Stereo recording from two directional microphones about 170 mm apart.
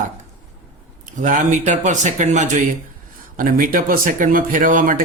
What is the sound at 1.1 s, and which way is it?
Speech, 45° right (ahead or behind).